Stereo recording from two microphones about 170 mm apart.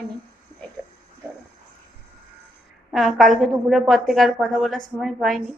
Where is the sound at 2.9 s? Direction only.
Centre (ahead or behind).